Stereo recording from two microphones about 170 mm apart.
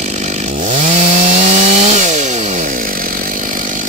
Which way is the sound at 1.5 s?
45° right (ahead or behind).